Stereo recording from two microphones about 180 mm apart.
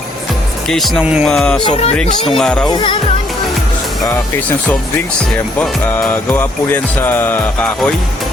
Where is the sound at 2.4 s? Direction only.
5° left (ahead or behind).